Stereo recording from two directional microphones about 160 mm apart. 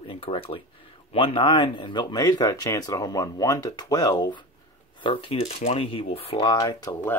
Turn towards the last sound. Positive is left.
turn(degrees=20)  # may be behind; listen again after turning